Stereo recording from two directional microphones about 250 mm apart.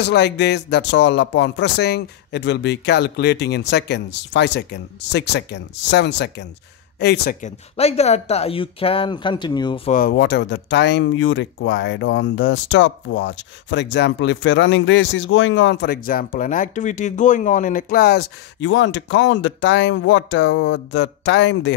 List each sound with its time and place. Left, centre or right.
0.0 s speech: left
7.4 s speech: left
9.9 s speech: left